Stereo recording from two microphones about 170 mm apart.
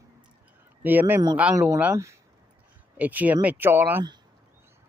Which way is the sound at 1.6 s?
20° right (ahead or behind).